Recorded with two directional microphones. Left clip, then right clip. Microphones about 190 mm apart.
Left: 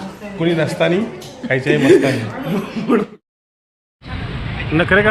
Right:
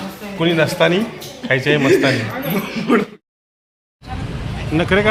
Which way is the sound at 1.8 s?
65° left (ahead or behind).